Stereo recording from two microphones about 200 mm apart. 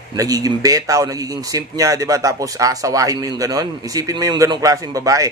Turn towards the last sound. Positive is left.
turn(degrees=-15)  # may be behind; listen again after turning